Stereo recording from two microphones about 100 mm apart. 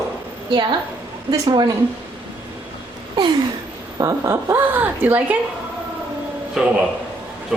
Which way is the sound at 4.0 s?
30° right (ahead or behind).